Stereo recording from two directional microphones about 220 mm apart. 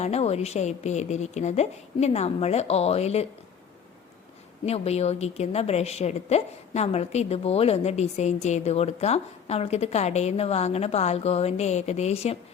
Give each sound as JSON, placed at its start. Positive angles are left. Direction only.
{"t": 0.0, "sound": "a woman's voice", "side_deg": 30}
{"t": 4.6, "sound": "a woman's voice", "side_deg": 30}